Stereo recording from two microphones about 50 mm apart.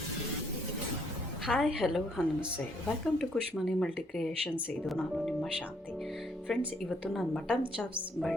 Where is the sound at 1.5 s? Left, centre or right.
Centre.